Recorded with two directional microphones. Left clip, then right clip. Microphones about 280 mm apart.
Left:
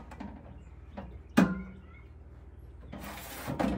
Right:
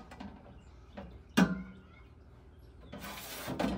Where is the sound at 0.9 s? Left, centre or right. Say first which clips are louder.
Left 2 dB; centre.